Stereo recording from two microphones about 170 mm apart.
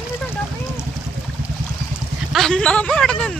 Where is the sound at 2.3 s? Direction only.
5° left (ahead or behind).